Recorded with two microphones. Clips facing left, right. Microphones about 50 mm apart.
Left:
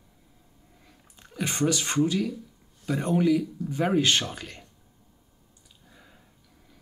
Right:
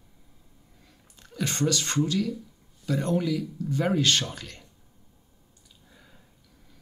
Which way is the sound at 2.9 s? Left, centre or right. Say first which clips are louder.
Left 3 dB; centre.